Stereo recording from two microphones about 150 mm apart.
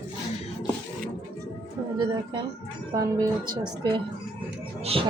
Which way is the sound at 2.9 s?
20° right (ahead or behind).